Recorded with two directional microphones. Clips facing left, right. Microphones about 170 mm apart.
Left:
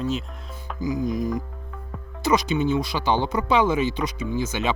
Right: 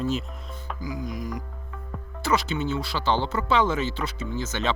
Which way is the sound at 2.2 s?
15° left (ahead or behind).